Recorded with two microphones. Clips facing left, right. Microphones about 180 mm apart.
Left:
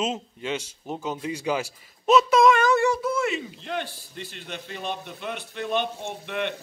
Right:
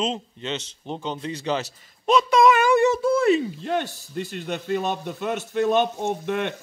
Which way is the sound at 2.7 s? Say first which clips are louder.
Right 4 dB; 20° right (ahead or behind).